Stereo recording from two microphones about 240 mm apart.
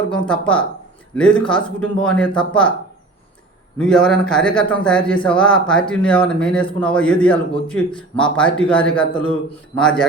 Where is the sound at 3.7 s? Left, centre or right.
Centre.